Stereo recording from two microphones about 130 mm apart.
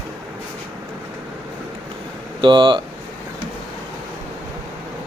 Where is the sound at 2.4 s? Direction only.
35° right (ahead or behind).